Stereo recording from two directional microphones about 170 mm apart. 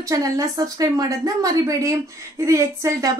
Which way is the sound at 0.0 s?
20° right (ahead or behind).